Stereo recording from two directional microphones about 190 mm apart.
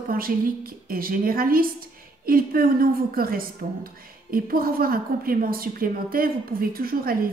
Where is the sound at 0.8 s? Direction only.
50° right (ahead or behind).